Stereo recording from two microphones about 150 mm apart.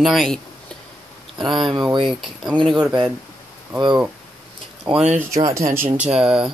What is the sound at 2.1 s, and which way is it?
Speech, centre (ahead or behind).